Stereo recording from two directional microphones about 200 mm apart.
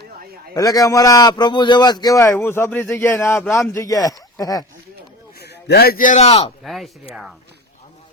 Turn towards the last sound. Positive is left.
turn(degrees=0)  # may be behind; listen again after turning